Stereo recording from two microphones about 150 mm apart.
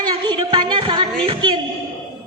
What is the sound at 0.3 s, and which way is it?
Music, 30° right (ahead or behind).